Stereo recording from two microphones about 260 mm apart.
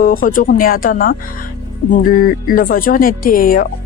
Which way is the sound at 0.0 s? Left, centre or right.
Left.